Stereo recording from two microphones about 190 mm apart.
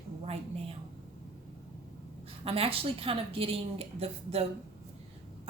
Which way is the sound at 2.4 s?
30° right (ahead or behind).